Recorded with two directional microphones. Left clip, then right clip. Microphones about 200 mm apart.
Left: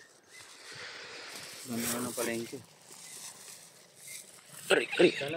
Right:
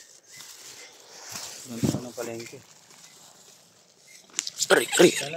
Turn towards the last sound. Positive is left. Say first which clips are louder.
# right 7 dB
turn(degrees=-40)  # may be behind; listen again after turning